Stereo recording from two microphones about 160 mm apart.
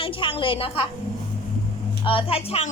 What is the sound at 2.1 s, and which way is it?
Speech, 35° left (ahead or behind).